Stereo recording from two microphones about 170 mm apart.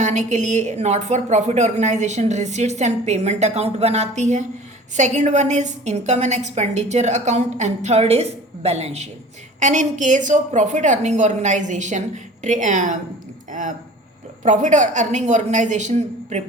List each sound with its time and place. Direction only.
0.0 s a woman's voice: 45° right (ahead or behind)